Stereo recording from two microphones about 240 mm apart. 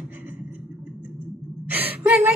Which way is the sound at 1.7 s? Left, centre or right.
Centre.